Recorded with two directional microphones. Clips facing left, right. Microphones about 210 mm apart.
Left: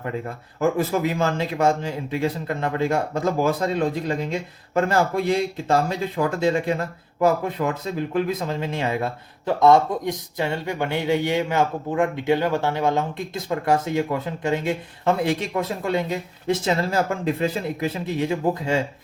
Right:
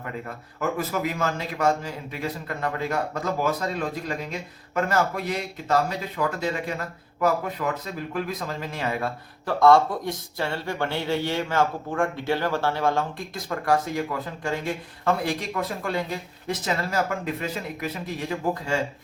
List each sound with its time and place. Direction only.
0.6 s speech: 30° left (ahead or behind)